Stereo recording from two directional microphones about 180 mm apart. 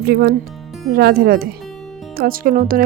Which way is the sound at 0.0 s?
60° right (ahead or behind).